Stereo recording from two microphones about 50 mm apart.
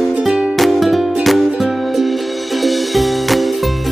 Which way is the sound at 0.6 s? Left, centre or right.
Centre.